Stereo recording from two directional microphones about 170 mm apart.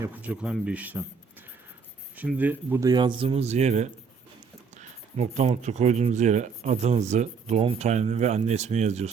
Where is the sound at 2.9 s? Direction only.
25° right (ahead or behind).